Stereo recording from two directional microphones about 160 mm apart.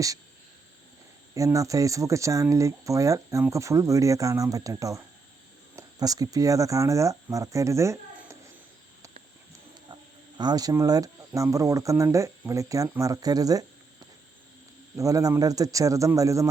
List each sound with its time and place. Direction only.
1.3 s speech: 20° right (ahead or behind)
9.9 s speech: 25° right (ahead or behind)